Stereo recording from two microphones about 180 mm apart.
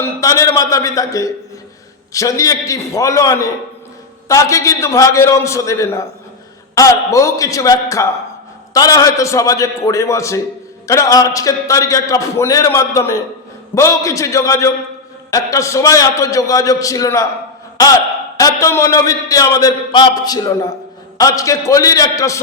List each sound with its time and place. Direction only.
0.0 s a man's voice: 15° left (ahead or behind)
18.3 s a man's voice: 15° left (ahead or behind)